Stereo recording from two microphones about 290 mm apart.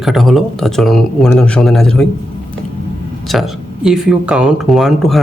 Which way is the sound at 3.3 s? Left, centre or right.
Centre.